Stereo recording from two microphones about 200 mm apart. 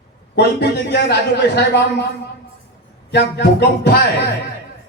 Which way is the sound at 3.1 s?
55° left (ahead or behind).